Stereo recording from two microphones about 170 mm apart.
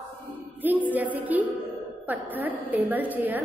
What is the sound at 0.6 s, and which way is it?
A woman's voice, 10° right (ahead or behind).